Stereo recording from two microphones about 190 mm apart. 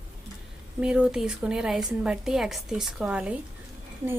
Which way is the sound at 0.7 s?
5° right (ahead or behind).